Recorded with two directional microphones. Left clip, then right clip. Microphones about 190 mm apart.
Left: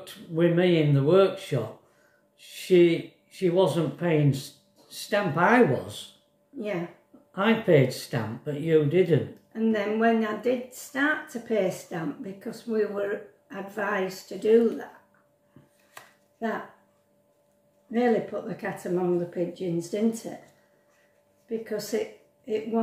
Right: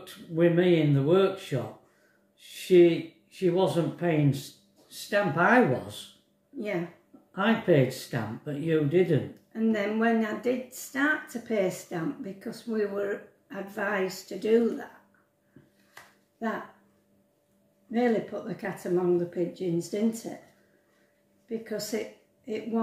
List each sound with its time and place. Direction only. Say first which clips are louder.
0.0 s speech: even; 20° left (ahead or behind)
7.6 s speech: left 3 dB; 20° left (ahead or behind)
9.5 s speech: left 2 dB; 10° right (ahead or behind)
17.9 s speech: left 2 dB; 10° right (ahead or behind)
21.5 s speech: left 3 dB; 10° right (ahead or behind)